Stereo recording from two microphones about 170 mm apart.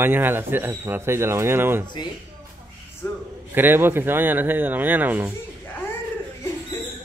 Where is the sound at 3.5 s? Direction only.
10° right (ahead or behind).